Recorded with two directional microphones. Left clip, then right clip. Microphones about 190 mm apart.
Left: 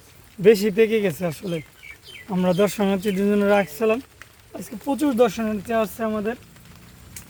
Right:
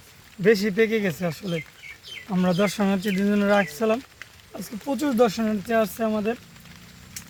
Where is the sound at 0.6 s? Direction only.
50° left (ahead or behind).